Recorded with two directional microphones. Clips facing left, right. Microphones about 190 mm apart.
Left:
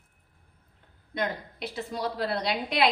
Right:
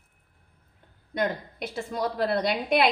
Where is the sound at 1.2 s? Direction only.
50° right (ahead or behind).